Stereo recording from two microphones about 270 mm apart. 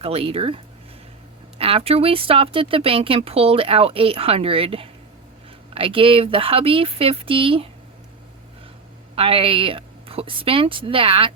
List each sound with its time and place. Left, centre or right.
0.0 s speech: right
9.1 s speech: centre